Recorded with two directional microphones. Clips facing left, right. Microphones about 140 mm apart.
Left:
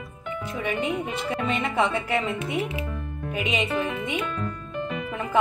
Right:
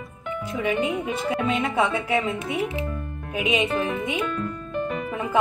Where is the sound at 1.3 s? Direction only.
Centre (ahead or behind).